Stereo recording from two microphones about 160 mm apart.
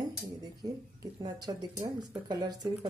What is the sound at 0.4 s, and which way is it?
Dishes, 25° right (ahead or behind).